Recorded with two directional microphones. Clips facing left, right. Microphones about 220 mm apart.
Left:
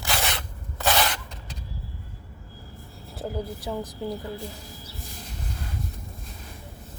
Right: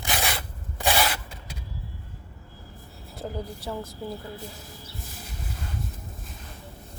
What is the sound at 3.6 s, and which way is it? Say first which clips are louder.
Speech: left 2 dB; 15° left (ahead or behind).